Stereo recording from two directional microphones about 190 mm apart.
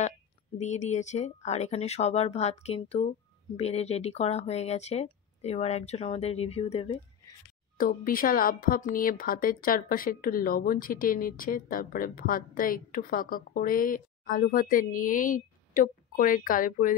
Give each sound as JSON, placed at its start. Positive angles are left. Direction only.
{"t": 0.6, "sound": "speech", "side_deg": 40}
{"t": 7.7, "sound": "a woman's voice", "side_deg": 50}